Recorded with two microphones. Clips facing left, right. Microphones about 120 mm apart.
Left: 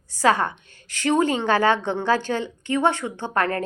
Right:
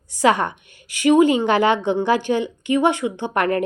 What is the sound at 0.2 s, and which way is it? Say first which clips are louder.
A woman's voice: right 2 dB; 20° right (ahead or behind).